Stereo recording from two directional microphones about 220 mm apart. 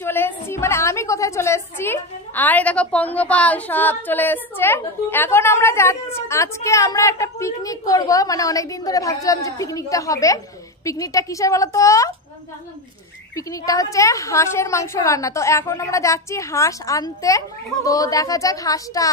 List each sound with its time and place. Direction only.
0.0 s a woman's voice: 10° left (ahead or behind)
13.4 s a woman's voice: 15° left (ahead or behind)